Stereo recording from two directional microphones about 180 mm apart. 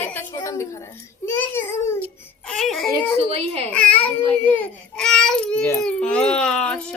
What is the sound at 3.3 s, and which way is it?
Speech, 35° right (ahead or behind).